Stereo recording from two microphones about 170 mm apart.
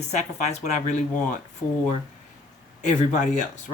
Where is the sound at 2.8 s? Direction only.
45° left (ahead or behind).